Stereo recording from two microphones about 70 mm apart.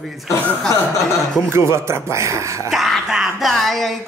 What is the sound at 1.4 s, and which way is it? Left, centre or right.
A man's voice, right.